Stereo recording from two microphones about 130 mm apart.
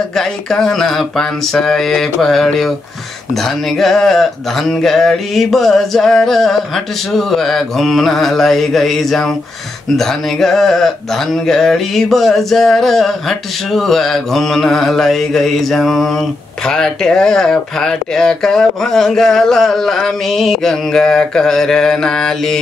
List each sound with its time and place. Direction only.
0.1 s speech: 5° left (ahead or behind)